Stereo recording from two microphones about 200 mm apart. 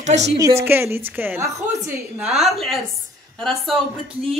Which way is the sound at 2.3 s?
Centre (ahead or behind).